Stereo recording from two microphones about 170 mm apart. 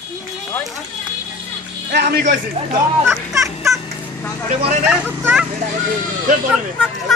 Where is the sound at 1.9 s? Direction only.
70° right (ahead or behind).